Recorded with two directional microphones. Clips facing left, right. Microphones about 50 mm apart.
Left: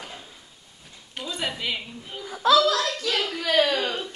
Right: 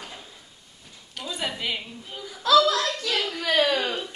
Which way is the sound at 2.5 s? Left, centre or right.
Right.